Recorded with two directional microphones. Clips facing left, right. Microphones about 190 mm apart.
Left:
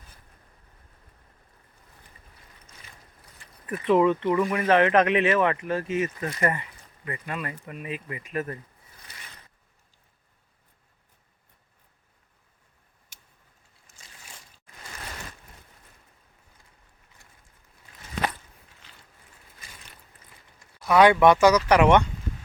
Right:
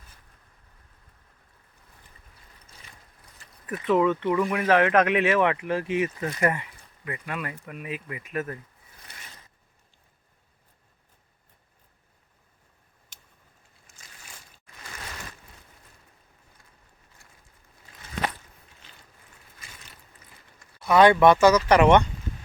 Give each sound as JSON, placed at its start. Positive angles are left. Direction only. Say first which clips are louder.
{"t": 3.7, "sound": "speech", "louder": "left 2 dB", "side_deg": 0}
{"t": 13.9, "sound": "a sound", "louder": "even", "side_deg": 35}
{"t": 20.8, "sound": "speech", "louder": "even", "side_deg": 5}